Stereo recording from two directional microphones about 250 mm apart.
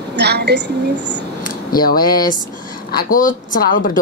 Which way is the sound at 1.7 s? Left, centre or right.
Left.